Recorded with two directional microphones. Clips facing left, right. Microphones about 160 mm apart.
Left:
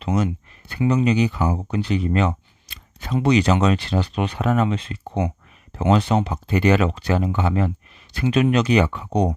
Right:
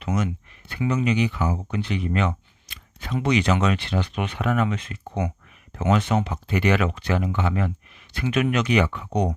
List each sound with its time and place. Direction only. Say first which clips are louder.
0.0 s speech: left 4 dB; 30° left (ahead or behind)